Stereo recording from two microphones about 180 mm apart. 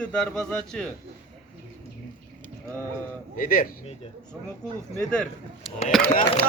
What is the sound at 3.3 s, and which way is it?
Speech, 55° left (ahead or behind).